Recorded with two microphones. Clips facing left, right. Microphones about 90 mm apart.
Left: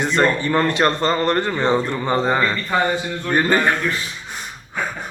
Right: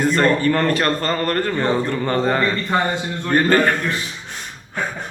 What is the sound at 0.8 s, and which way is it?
A man's voice, 20° left (ahead or behind).